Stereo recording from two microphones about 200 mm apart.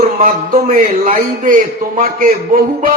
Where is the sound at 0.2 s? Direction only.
45° right (ahead or behind).